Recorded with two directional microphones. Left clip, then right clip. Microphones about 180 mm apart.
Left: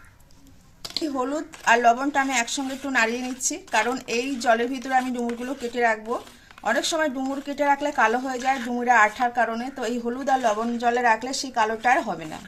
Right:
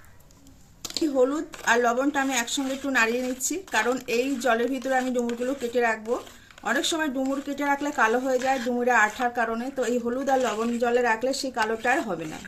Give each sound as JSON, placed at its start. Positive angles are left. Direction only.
{"t": 1.1, "sound": "speech", "side_deg": 20}